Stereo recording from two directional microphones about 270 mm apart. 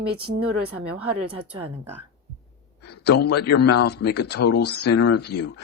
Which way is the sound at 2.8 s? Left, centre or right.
Left.